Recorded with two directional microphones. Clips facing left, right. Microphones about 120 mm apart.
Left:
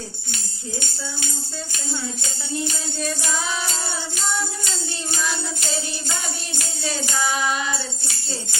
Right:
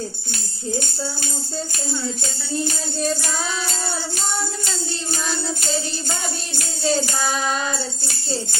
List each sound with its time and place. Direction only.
0.8 s music: 40° right (ahead or behind)
6.5 s music: 35° right (ahead or behind)
7.5 s jingle bell: 40° right (ahead or behind)